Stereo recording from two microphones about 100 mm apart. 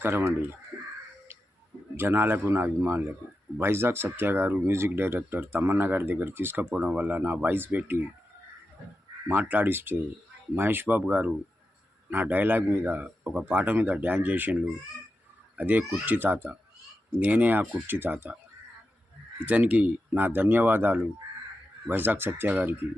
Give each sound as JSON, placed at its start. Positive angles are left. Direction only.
{"t": 0.0, "sound": "speech", "side_deg": -20}
{"t": 2.0, "sound": "a man's voice", "side_deg": -20}
{"t": 9.2, "sound": "a man's voice", "side_deg": -15}
{"t": 19.5, "sound": "speech", "side_deg": -15}